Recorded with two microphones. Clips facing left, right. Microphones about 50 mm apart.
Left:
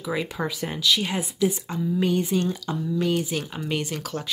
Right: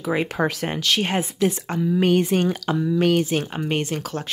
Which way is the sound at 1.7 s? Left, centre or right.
Right.